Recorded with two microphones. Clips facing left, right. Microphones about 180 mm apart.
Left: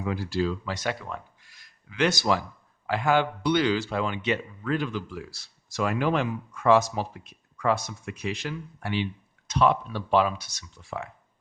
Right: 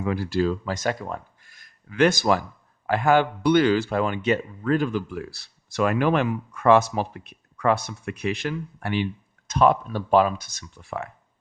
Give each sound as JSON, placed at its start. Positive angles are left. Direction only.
{"t": 0.0, "sound": "speech", "side_deg": -60}